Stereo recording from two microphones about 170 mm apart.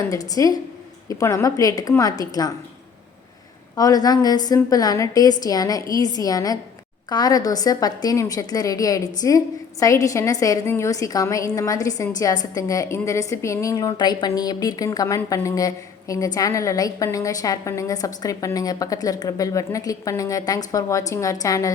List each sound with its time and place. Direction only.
0.1 s a woman's voice: 20° left (ahead or behind)
3.8 s a woman's voice: 20° left (ahead or behind)